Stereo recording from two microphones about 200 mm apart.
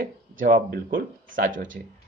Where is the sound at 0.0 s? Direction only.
45° right (ahead or behind).